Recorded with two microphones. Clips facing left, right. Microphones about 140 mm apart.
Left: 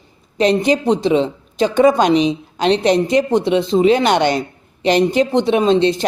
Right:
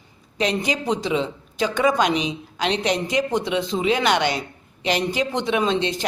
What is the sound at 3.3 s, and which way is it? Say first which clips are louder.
Speech: left 8 dB; 25° left (ahead or behind).